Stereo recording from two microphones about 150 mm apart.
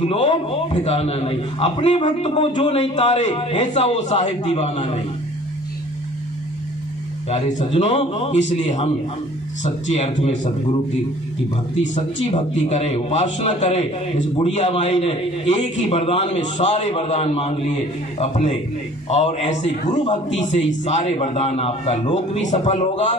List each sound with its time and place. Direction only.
0.0 s a man's voice: 45° left (ahead or behind)
7.2 s a man's voice: 50° left (ahead or behind)
11.9 s a man's voice: 50° left (ahead or behind)